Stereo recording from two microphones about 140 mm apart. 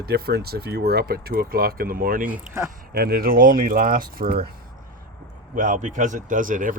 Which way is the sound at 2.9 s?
90° right.